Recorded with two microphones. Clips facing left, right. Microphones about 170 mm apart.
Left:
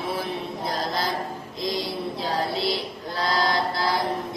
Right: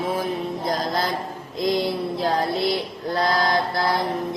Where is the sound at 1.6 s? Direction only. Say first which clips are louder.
Right 6 dB; 55° right (ahead or behind).